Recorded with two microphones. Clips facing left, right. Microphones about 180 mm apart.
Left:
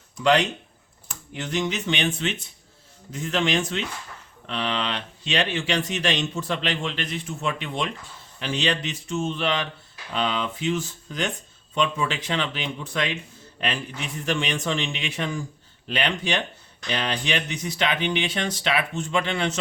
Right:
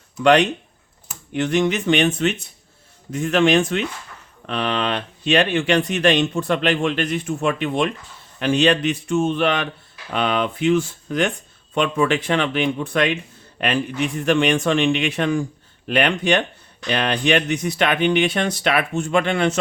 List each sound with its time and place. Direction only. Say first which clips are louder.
0.2 s speech: right 5 dB; 60° right (ahead or behind)